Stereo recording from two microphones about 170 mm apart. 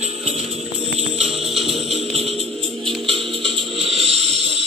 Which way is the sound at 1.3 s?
Centre (ahead or behind).